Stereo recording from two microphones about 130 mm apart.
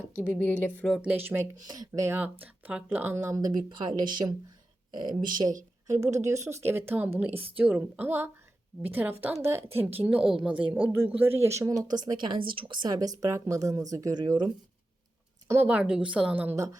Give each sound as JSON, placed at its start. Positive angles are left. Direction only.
{"t": 0.2, "sound": "speech", "side_deg": 15}
{"t": 0.9, "sound": "speech", "side_deg": 0}
{"t": 1.1, "sound": "speech", "side_deg": -15}
{"t": 1.6, "sound": "speech", "side_deg": -30}
{"t": 5.9, "sound": "speech", "side_deg": -25}
{"t": 15.4, "sound": "speech", "side_deg": -15}